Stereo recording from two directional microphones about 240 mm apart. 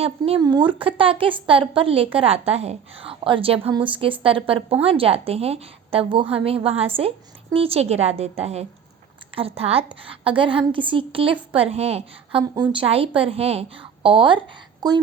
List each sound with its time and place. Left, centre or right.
0.0 s a woman's voice: right